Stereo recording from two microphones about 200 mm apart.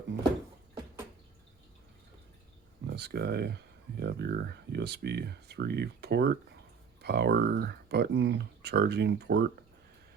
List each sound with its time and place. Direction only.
2.8 s speech: 55° right (ahead or behind)